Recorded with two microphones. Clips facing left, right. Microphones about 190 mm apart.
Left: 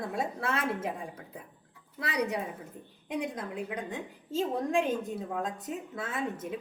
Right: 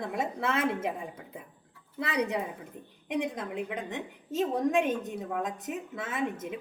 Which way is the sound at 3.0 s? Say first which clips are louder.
Right 2 dB; 20° right (ahead or behind).